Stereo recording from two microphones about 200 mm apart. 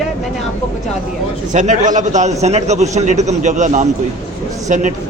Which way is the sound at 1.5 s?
40° right (ahead or behind).